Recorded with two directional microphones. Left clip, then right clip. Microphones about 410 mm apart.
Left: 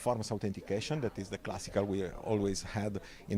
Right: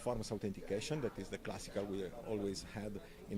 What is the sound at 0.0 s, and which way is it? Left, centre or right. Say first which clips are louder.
Speech: left 6 dB; left.